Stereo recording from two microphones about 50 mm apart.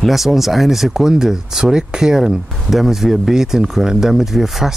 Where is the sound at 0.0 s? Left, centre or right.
Centre.